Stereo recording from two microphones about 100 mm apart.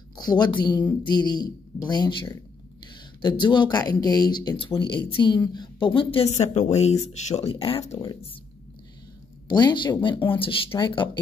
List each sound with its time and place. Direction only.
0.1 s speech: 45° left (ahead or behind)
4.6 s a woman's voice: 55° left (ahead or behind); by 8.0 s 80° left
9.5 s speech: 45° left (ahead or behind)